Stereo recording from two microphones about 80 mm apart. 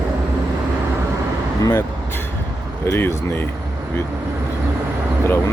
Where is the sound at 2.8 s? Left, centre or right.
Left.